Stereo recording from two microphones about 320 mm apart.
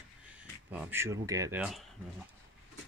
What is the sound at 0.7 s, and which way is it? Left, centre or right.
Speech, centre.